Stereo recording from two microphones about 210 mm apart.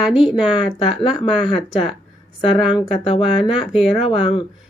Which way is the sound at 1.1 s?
Centre (ahead or behind).